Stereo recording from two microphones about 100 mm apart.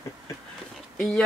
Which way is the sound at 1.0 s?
5° left (ahead or behind).